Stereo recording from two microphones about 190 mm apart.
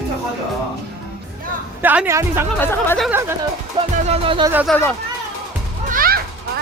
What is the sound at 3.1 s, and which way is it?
Speech, 10° right (ahead or behind).